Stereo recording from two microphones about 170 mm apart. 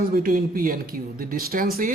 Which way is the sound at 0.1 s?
55° right (ahead or behind).